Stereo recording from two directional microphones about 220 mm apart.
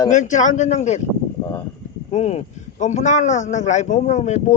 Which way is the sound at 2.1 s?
30° left (ahead or behind).